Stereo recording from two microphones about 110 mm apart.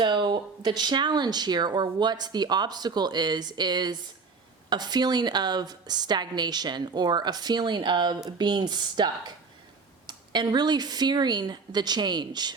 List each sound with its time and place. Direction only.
0.0 s speech: 45° right (ahead or behind)